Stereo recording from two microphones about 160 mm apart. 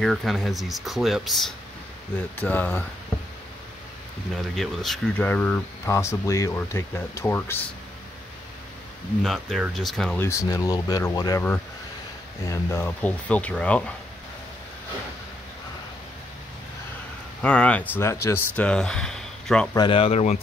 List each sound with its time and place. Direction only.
0.0 s speech: centre (ahead or behind)
2.3 s speech: 10° left (ahead or behind)
4.6 s speech: centre (ahead or behind)
9.2 s speech: centre (ahead or behind)
10.2 s speech: 20° left (ahead or behind)
12.4 s speech: 15° left (ahead or behind)
17.4 s speech: 5° left (ahead or behind)
19.7 s speech: 30° left (ahead or behind)